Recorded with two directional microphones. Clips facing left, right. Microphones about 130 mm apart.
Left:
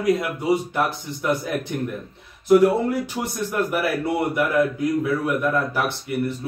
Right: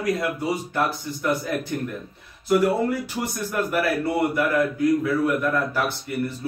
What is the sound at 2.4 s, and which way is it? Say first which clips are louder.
A man's voice: left 4 dB; 20° left (ahead or behind).